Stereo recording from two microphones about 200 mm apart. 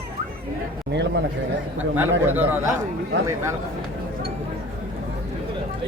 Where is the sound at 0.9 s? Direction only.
60° right (ahead or behind).